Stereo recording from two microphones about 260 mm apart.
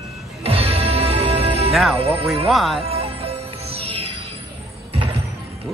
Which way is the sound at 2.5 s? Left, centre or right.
Centre.